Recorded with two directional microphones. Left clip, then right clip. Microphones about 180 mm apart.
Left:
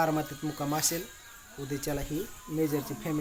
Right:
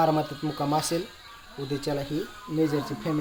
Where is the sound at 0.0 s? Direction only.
Centre (ahead or behind).